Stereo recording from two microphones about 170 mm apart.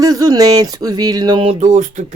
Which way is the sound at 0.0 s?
20° right (ahead or behind).